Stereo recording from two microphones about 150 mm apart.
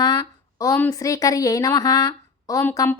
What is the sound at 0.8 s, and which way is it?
Speech, 20° left (ahead or behind).